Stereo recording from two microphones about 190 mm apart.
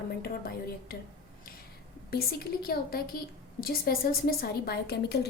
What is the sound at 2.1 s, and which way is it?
A woman's voice, 55° left (ahead or behind).